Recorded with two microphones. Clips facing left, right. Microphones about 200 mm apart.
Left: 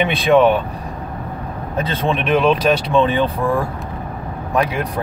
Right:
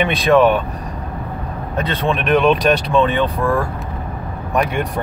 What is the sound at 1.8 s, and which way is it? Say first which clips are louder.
Speech: even; centre (ahead or behind).